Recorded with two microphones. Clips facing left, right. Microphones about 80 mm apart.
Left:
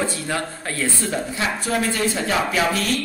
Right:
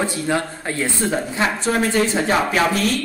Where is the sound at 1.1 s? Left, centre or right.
Right.